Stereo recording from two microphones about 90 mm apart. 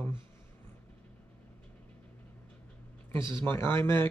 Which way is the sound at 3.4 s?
25° left (ahead or behind).